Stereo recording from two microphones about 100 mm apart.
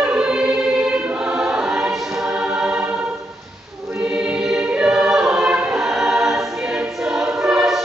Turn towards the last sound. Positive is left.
turn(degrees=-5)  # may be behind; listen again after turning